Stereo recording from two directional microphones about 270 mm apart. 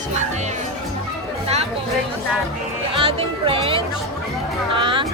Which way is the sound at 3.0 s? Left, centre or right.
Centre.